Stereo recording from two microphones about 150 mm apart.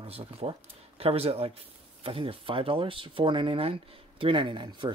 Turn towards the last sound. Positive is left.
turn(degrees=-30)  # may be behind; listen again after turning